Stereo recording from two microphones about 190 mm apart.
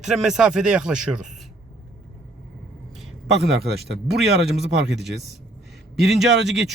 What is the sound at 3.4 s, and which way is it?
Speech, 60° right (ahead or behind).